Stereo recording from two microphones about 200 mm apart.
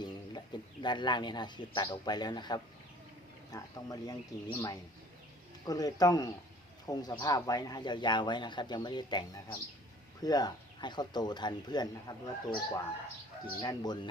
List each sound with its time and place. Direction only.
0.0 s speech: 20° left (ahead or behind)